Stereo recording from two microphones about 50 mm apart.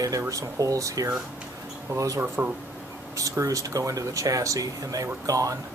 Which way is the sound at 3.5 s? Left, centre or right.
Right.